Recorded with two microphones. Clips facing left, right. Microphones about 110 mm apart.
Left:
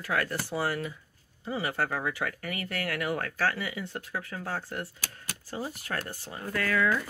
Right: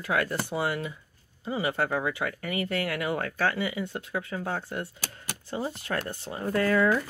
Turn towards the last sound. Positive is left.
turn(degrees=-30)  # may be behind; listen again after turning